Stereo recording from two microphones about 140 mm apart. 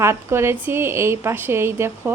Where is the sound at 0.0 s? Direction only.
20° right (ahead or behind).